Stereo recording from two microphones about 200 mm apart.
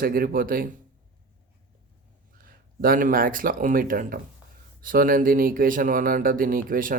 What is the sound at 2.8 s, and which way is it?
Speech, 45° right (ahead or behind).